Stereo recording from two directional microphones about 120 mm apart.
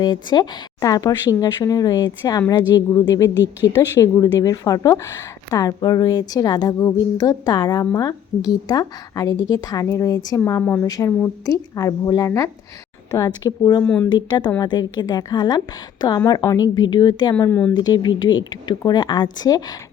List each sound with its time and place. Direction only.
0.0 s a woman's voice: 35° left (ahead or behind)
13.8 s speech: 10° left (ahead or behind)
14.1 s a woman's voice: 35° left (ahead or behind)
17.5 s speech: 15° left (ahead or behind)
17.7 s a woman's voice: 35° left (ahead or behind)